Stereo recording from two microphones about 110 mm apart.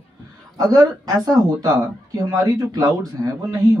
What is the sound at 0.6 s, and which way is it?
Speech, 35° right (ahead or behind).